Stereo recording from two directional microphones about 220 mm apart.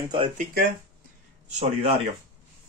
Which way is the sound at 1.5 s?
30° right (ahead or behind).